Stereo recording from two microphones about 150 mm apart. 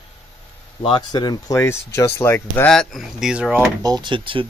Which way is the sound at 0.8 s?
30° left (ahead or behind).